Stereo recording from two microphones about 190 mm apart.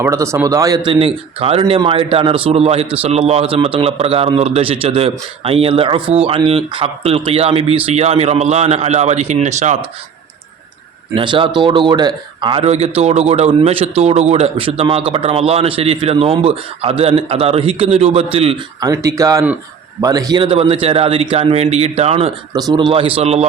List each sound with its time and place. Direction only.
0.0 s speech: 15° right (ahead or behind)
0.9 s a man's voice: 30° right (ahead or behind)
11.1 s a man's voice: 25° right (ahead or behind)
22.5 s speech: 20° right (ahead or behind)